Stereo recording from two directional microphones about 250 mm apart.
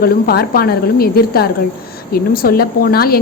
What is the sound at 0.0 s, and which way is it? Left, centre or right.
A woman's voice, left.